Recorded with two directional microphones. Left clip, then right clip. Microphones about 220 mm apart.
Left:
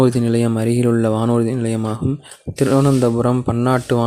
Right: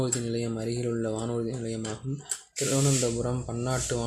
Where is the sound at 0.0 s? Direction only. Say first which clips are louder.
Left 14 dB; 45° left (ahead or behind).